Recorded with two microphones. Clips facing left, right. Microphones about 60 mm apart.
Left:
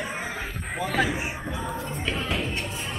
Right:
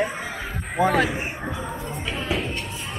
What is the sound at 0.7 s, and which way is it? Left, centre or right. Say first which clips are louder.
Speech: right 5 dB; centre.